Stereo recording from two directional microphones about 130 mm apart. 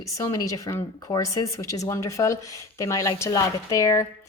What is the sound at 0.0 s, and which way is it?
A woman's voice, 25° left (ahead or behind).